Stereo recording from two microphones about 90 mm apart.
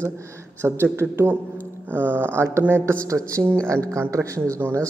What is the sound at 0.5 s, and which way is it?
Speech, 25° right (ahead or behind).